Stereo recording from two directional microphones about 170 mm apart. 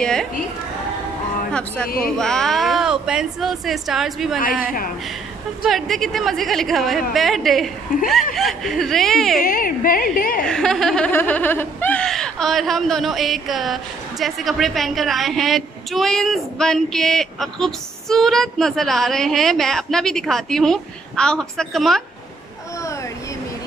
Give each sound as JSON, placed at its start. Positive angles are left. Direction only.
{"t": 0.0, "sound": "a sound", "side_deg": 5}
{"t": 1.5, "sound": "a woman's voice", "side_deg": 5}
{"t": 5.7, "sound": "a woman's voice", "side_deg": 0}
{"t": 9.4, "sound": "a woman's voice", "side_deg": 55}
{"t": 10.5, "sound": "a woman's voice", "side_deg": 5}